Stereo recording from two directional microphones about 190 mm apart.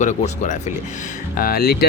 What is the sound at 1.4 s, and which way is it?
Speech, 50° left (ahead or behind).